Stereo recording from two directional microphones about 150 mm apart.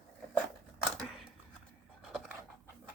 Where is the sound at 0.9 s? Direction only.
5° left (ahead or behind).